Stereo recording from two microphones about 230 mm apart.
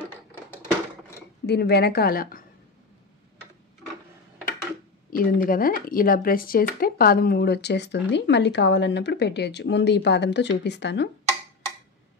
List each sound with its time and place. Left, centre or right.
1.4 s speech: left
5.1 s speech: left